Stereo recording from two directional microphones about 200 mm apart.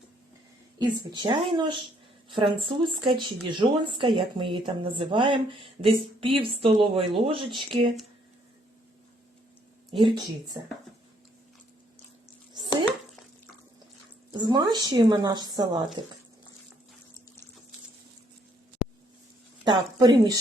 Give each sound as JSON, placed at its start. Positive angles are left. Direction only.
{"t": 0.8, "sound": "a woman's voice", "side_deg": -20}
{"t": 10.0, "sound": "a woman's voice", "side_deg": -25}
{"t": 10.5, "sound": "speech", "side_deg": -15}
{"t": 14.3, "sound": "a woman's voice", "side_deg": -20}
{"t": 19.6, "sound": "a woman's voice", "side_deg": -20}